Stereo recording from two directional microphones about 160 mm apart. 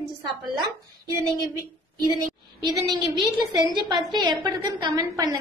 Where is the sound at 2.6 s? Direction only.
25° right (ahead or behind).